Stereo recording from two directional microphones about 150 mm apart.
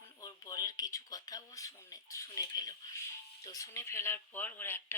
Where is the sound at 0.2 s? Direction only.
25° left (ahead or behind).